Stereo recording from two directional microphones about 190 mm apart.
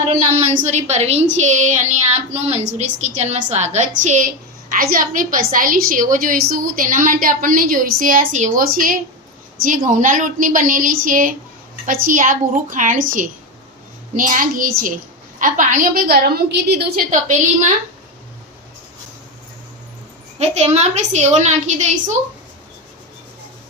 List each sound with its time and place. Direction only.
0.1 s a woman's voice: 40° right (ahead or behind); by 16.8 s 60° right (ahead or behind)
17.1 s a woman's voice: 40° right (ahead or behind)
20.4 s a woman's voice: 35° right (ahead or behind)